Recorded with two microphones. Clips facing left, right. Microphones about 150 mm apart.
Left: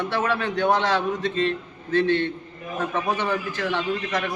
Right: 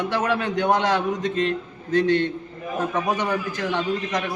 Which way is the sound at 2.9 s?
15° right (ahead or behind).